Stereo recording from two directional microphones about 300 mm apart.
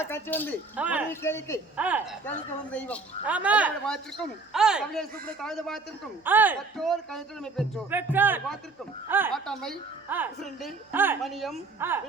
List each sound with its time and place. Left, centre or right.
0.0 s a woman's voice: centre
0.8 s a woman's voice: centre
1.1 s speech: centre
1.7 s a woman's voice: centre